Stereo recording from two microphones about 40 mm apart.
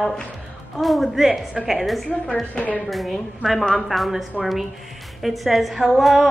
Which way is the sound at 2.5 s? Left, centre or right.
Left.